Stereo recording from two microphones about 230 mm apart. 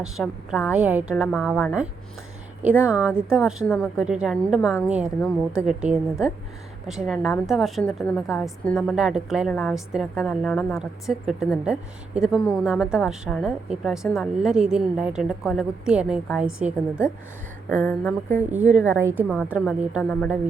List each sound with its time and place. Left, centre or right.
0.0 s a woman's voice: centre
17.7 s speech: centre
18.3 s a woman's voice: centre
20.0 s a woman's voice: centre